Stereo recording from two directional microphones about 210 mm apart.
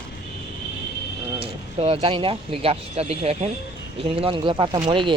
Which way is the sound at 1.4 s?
25° right (ahead or behind).